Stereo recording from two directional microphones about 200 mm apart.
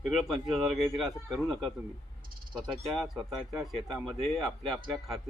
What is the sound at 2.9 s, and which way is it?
Speech, centre (ahead or behind).